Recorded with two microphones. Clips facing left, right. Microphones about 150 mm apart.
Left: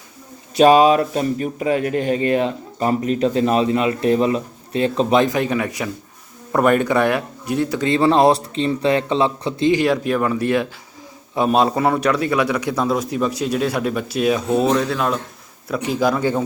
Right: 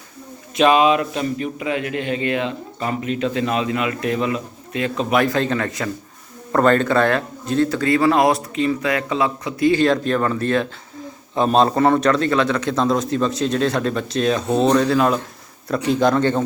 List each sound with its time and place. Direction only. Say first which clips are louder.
0.5 s speech: left 3 dB; 35° left (ahead or behind)
5.2 s a man's voice: left 1 dB; 15° left (ahead or behind)
9.7 s a man's voice: even; 10° left (ahead or behind)